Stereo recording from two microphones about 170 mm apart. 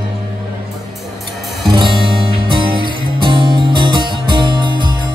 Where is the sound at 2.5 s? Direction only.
30° right (ahead or behind).